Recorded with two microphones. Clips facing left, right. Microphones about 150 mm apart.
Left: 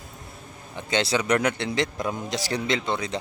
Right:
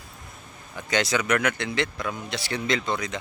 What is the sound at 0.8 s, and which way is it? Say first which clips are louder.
Speech: left 1 dB; 25° left (ahead or behind).